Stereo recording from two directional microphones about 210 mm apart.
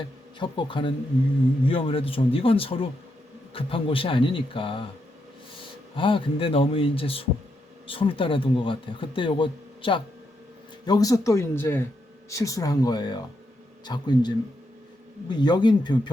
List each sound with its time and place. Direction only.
0.0 s a man's voice: 20° left (ahead or behind)